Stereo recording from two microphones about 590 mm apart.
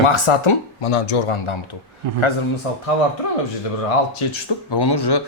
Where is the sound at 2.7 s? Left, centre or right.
Left.